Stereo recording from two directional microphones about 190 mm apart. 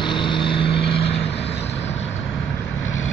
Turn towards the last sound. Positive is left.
turn(degrees=30)  # may be behind; listen again after turning